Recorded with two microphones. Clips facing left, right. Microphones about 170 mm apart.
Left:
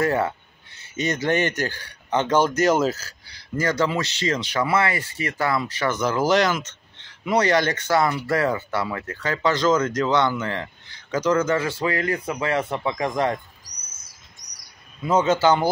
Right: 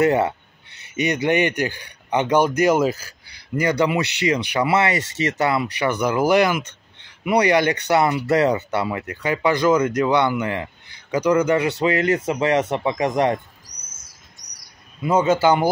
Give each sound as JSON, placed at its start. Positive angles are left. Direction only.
{"t": 0.0, "sound": "speech", "side_deg": -20}
{"t": 15.0, "sound": "speech", "side_deg": -10}